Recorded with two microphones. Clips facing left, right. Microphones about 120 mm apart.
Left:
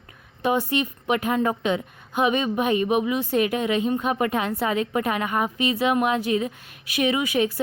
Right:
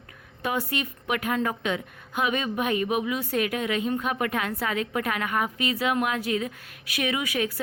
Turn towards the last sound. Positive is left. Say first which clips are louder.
# left 5 dB
turn(degrees=25)  # may be behind; listen again after turning